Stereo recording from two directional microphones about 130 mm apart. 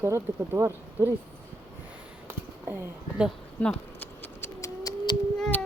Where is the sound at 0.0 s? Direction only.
20° right (ahead or behind).